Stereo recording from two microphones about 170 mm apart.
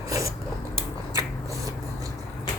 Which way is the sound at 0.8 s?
15° right (ahead or behind).